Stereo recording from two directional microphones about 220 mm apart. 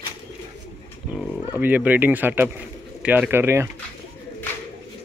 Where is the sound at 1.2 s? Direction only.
5° right (ahead or behind).